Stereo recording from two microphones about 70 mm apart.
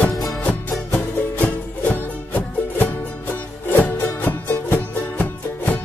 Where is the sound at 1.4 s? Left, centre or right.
Left.